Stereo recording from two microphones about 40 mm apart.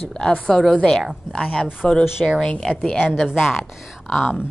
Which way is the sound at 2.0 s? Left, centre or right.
Centre.